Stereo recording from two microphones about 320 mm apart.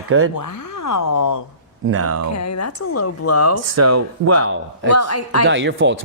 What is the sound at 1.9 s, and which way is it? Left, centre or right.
Speech, right.